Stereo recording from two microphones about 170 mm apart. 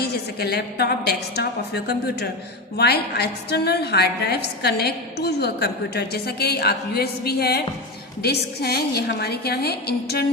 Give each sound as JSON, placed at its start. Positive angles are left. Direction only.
{"t": 0.0, "sound": "a woman's voice", "side_deg": 70}